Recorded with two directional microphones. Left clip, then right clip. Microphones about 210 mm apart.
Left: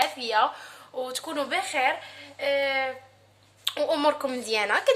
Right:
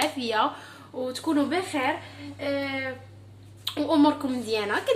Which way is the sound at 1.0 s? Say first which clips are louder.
Right 5 dB; 35° left (ahead or behind).